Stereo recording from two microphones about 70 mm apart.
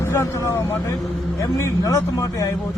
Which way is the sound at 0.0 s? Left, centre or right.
Left.